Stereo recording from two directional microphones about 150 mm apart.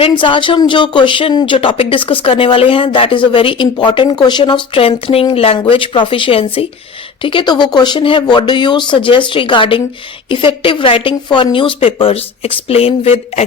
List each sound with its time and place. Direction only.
0.0 s speech: 35° left (ahead or behind)